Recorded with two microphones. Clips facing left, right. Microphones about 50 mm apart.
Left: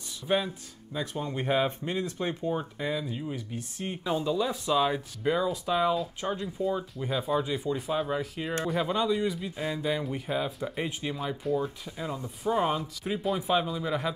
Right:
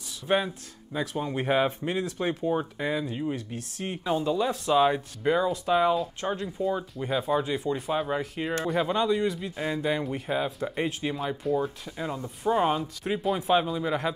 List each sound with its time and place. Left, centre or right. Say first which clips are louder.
0.3 s speech: right 2 dB; right
3.3 s speech: right 1 dB; centre
3.8 s speech: right 2 dB; centre
7.9 s speech: right 1 dB; centre
8.6 s speech: right 2 dB; centre
13.2 s speech: right 3 dB; centre